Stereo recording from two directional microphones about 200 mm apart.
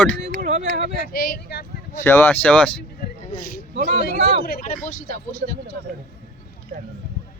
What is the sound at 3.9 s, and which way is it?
Speech, 55° left (ahead or behind).